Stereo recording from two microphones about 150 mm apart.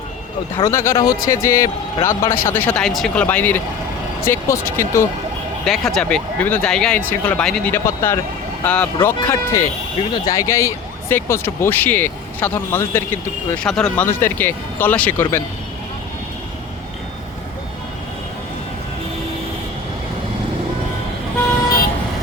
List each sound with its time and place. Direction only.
0.5 s speech: 20° left (ahead or behind)
2.8 s speech: centre (ahead or behind)
3.2 s speech: 10° left (ahead or behind)
5.6 s speech: centre (ahead or behind)